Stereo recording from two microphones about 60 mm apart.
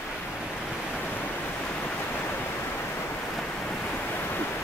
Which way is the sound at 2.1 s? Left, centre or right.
Left.